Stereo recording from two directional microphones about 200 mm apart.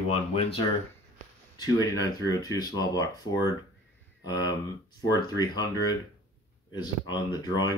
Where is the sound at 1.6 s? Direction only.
20° left (ahead or behind).